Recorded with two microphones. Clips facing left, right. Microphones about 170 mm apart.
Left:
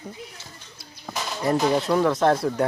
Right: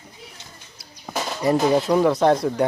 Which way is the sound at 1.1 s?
15° right (ahead or behind).